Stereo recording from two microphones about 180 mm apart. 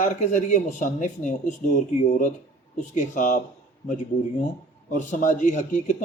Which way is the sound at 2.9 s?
45° left (ahead or behind).